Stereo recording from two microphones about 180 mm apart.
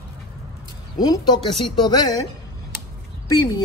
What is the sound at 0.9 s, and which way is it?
Speech, 20° left (ahead or behind).